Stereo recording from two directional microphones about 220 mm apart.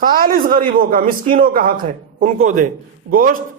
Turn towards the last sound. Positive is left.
turn(degrees=-40)  # may be behind; listen again after turning